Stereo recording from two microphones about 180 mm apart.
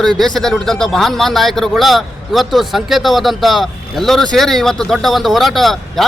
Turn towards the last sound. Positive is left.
turn(degrees=0)  # may be behind; listen again after turning